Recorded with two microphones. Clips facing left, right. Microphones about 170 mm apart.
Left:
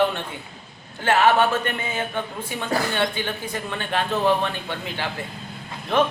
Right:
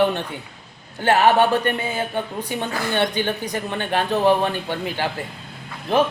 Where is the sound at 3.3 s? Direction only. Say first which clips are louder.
Right 4 dB; 20° right (ahead or behind).